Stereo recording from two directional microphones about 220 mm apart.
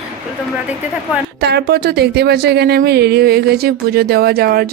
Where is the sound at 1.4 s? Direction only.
45° right (ahead or behind).